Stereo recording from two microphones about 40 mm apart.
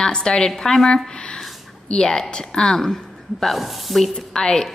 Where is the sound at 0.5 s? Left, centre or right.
Centre.